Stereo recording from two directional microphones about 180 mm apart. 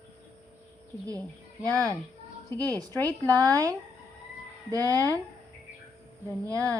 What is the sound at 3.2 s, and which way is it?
A woman's voice, 20° right (ahead or behind).